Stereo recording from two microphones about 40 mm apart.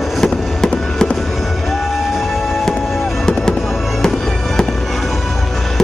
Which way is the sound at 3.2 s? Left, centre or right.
Centre.